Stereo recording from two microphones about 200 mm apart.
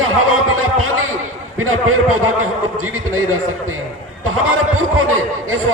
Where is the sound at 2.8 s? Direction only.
90° right.